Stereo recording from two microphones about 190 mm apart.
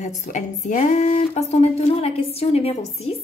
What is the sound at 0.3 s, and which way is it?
Speech, 40° left (ahead or behind).